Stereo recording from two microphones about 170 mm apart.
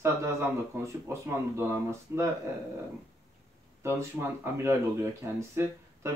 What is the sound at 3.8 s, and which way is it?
Speech, 15° right (ahead or behind).